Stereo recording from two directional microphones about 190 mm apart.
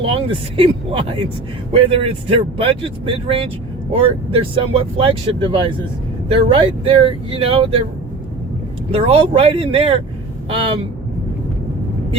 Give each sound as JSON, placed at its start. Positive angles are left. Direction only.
{"t": 0.0, "sound": "speech", "side_deg": -30}
{"t": 8.9, "sound": "speech", "side_deg": -30}